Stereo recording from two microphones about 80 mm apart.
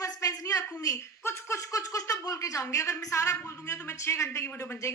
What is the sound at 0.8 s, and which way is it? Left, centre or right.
Speech, left.